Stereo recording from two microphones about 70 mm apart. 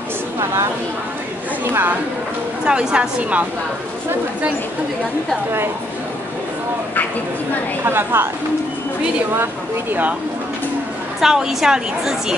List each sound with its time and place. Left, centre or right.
1.7 s speech: right
2.6 s a woman's voice: centre
7.8 s a woman's voice: right
9.4 s speech: right
11.1 s a woman's voice: centre